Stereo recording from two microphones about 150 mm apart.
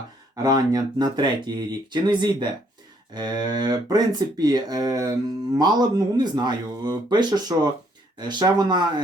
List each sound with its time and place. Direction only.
0.4 s speech: 25° right (ahead or behind)